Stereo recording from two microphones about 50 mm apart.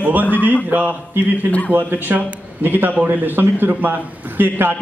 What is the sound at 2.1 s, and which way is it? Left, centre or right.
A man's voice, right.